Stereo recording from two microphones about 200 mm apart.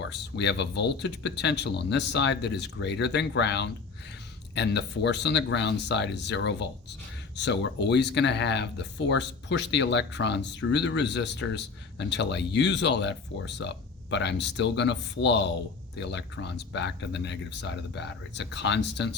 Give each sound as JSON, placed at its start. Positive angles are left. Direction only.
{"t": 0.0, "sound": "speech", "side_deg": 60}